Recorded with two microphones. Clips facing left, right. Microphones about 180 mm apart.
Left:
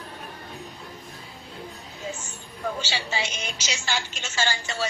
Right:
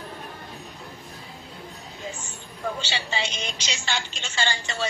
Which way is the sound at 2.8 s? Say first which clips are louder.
Even; 10° left (ahead or behind).